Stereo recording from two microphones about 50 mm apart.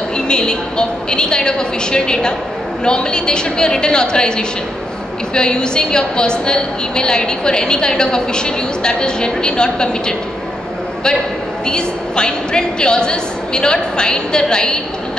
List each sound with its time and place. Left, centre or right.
0.3 s a woman's voice: centre
11.6 s a woman's voice: centre